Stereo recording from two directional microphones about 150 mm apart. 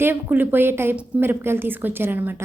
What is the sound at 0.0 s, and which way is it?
A woman's voice, 15° right (ahead or behind).